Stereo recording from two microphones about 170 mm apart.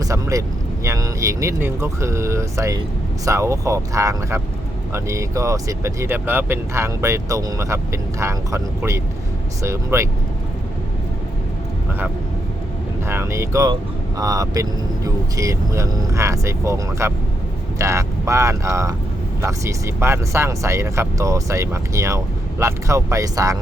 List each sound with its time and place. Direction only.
0.0 s speech: 20° right (ahead or behind)
13.1 s speech: 15° right (ahead or behind)